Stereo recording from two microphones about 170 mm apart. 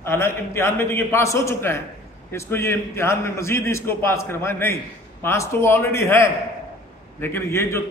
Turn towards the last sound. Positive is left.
turn(degrees=15)  # may be behind; listen again after turning